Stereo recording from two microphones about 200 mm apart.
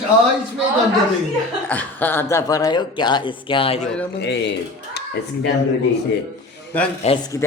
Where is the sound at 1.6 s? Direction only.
10° left (ahead or behind); by 3.8 s 25° left (ahead or behind).